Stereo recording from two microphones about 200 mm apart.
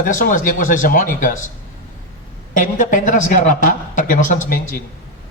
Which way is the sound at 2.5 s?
40° left (ahead or behind).